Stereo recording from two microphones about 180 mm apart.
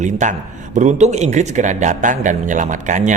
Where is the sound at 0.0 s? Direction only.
40° right (ahead or behind).